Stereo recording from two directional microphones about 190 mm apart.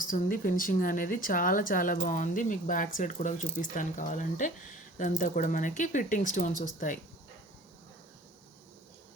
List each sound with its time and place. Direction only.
0.0 s speech: 45° left (ahead or behind)